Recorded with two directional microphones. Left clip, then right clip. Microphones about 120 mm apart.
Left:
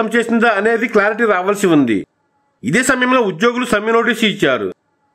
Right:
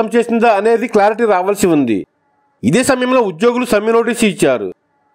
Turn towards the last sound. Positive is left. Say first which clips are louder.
# right 1 dB
turn(degrees=-35)  # may be behind; listen again after turning